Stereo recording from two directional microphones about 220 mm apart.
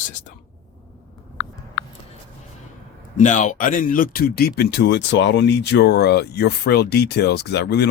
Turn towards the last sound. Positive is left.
turn(degrees=50)  # may be behind; listen again after turning